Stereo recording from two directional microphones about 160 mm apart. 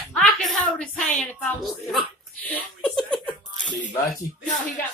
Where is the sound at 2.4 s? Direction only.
10° left (ahead or behind).